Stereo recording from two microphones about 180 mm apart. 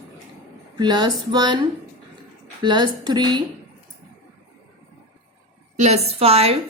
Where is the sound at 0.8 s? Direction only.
25° right (ahead or behind).